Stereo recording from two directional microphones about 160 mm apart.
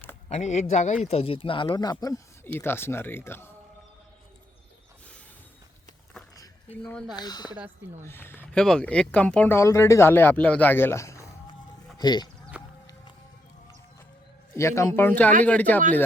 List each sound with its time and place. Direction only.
0.3 s speech: 45° left (ahead or behind); by 3.5 s 15° left (ahead or behind)
6.8 s speech: 5° left (ahead or behind)
7.2 s speech: 25° left (ahead or behind)
8.0 s speech: 15° left (ahead or behind)
12.5 s a sound: 10° right (ahead or behind)
14.5 s speech: 15° left (ahead or behind)